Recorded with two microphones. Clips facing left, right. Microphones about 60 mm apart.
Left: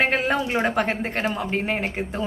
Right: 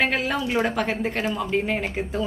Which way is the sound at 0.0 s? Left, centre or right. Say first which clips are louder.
Left 2 dB; left.